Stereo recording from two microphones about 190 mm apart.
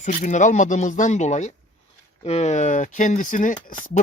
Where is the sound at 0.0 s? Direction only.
40° left (ahead or behind).